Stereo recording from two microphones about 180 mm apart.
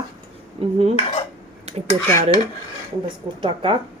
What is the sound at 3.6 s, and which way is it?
Speech, 30° right (ahead or behind).